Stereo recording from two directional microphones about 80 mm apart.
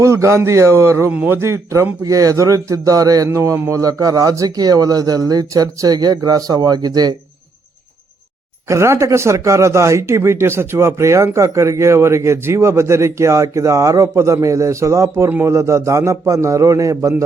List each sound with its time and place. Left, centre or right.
0.0 s speech: right
1.1 s a man's voice: centre
1.4 s a man's voice: right
8.6 s speech: right